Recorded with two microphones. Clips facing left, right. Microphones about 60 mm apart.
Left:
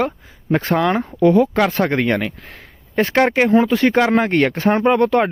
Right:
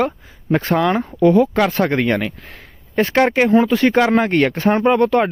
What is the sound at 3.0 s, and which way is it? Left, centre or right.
Speech, left.